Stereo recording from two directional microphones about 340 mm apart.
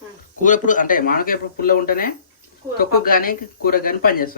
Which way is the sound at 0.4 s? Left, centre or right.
Left.